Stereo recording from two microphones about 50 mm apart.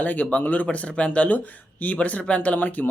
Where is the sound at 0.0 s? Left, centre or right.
Left.